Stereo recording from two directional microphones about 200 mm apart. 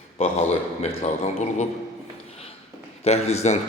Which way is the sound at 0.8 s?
35° left (ahead or behind).